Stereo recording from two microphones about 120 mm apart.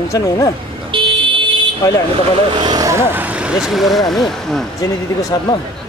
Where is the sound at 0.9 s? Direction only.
45° right (ahead or behind).